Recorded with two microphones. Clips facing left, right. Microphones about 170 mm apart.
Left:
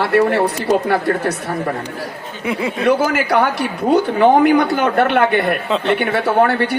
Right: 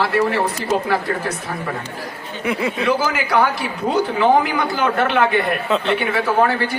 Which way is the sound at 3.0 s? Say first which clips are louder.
Left 2 dB; 60° left (ahead or behind).